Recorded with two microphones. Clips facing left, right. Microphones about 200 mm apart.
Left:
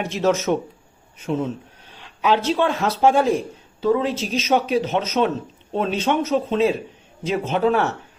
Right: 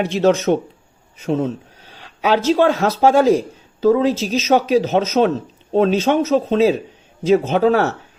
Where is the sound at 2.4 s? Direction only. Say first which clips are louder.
Right 6 dB; 45° right (ahead or behind).